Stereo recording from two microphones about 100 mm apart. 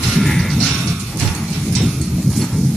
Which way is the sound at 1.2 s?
Centre (ahead or behind).